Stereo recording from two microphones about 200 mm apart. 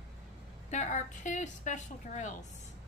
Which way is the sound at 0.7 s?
35° left (ahead or behind).